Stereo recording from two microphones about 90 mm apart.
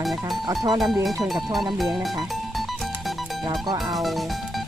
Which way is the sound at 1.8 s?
Centre (ahead or behind).